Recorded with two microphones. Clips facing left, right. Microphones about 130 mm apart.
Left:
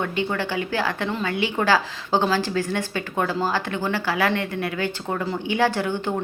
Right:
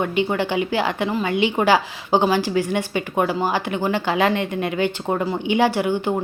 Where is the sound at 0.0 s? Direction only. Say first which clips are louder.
Right 4 dB; 15° right (ahead or behind).